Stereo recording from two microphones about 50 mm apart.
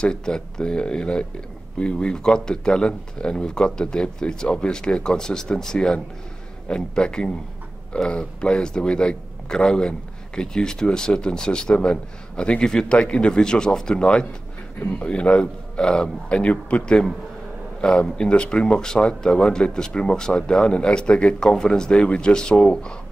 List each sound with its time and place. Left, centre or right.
0.0 s speech: centre